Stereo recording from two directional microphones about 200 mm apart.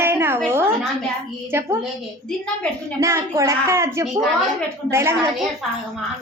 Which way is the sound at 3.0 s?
15° right (ahead or behind).